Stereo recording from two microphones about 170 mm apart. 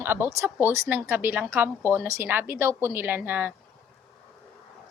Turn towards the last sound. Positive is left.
turn(degrees=-10)  # may be behind; listen again after turning